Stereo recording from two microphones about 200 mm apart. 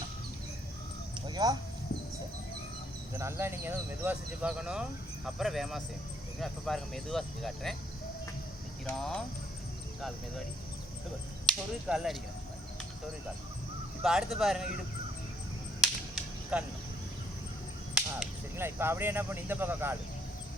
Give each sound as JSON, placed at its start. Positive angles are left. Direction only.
{"t": 1.3, "sound": "speech", "side_deg": -20}
{"t": 3.2, "sound": "speech", "side_deg": -10}
{"t": 9.0, "sound": "speech", "side_deg": 0}
{"t": 11.4, "sound": "speech", "side_deg": 0}
{"t": 14.0, "sound": "speech", "side_deg": 0}
{"t": 15.8, "sound": "whip", "side_deg": -5}
{"t": 17.9, "sound": "speech", "side_deg": -5}